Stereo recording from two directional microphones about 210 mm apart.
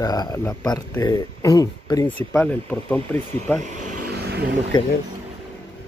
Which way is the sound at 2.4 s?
5° left (ahead or behind).